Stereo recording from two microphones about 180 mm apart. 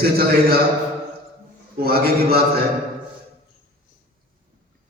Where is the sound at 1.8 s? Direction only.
55° right (ahead or behind).